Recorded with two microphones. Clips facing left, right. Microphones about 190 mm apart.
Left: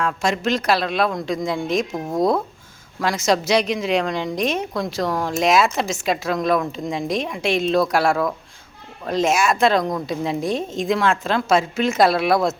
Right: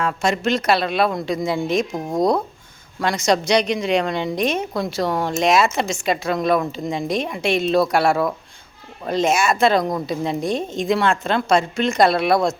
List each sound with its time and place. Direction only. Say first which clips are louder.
0.0 s a woman's voice: right 1 dB; centre (ahead or behind)